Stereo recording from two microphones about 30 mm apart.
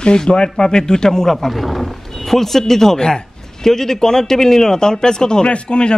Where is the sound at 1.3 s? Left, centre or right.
Centre; by 5.4 s left.